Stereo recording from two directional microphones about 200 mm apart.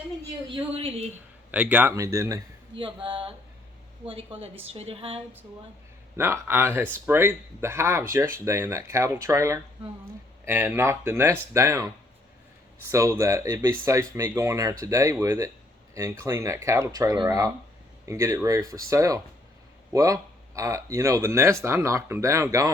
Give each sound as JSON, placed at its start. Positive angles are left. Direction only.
{"t": 0.4, "sound": "a woman's voice", "side_deg": -25}
{"t": 1.5, "sound": "speech", "side_deg": -5}
{"t": 2.7, "sound": "a woman's voice", "side_deg": -25}
{"t": 6.1, "sound": "speech", "side_deg": -10}
{"t": 12.9, "sound": "speech", "side_deg": -15}